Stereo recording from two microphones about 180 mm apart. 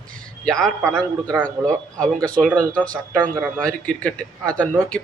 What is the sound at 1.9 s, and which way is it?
Speech, 5° left (ahead or behind).